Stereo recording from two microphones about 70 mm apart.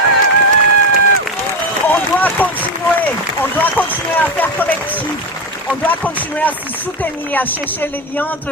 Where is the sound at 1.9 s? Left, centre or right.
Left.